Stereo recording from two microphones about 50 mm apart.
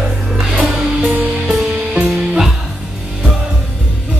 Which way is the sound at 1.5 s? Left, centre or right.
Centre.